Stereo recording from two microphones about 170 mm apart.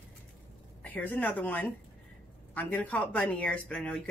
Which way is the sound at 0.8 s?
10° left (ahead or behind).